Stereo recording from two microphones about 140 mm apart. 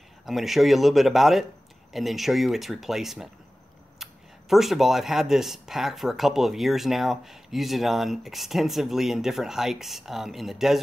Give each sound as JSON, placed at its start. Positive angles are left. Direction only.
{"t": 0.2, "sound": "speech", "side_deg": 0}